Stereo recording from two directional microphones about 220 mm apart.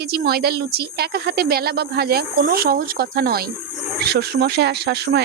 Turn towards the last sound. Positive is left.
turn(degrees=-50)  # may be behind; listen again after turning